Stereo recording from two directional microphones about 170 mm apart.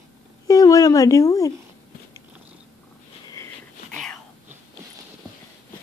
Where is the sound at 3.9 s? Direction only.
5° left (ahead or behind).